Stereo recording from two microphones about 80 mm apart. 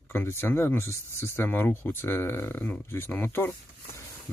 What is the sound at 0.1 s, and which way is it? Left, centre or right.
Speech, left.